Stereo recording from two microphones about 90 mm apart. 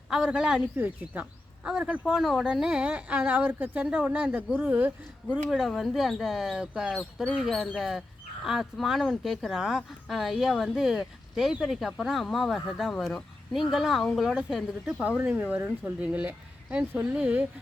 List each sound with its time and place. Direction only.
0.1 s speech: 10° right (ahead or behind)
2.5 s speech: 10° right (ahead or behind)
5.3 s speech: 5° right (ahead or behind)
15.0 s speech: 15° right (ahead or behind)